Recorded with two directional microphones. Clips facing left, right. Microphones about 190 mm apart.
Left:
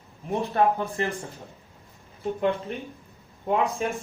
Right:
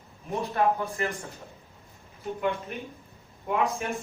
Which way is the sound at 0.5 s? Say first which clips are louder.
Left 2 dB; 30° left (ahead or behind).